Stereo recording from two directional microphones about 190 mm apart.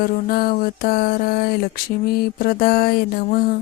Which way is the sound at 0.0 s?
50° left (ahead or behind).